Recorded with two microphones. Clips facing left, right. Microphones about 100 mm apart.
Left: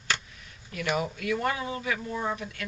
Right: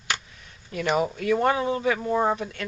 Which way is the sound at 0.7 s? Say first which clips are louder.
Right 5 dB; 30° right (ahead or behind).